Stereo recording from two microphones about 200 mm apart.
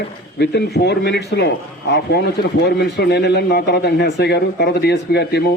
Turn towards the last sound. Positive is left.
turn(degrees=55)  # may be behind; listen again after turning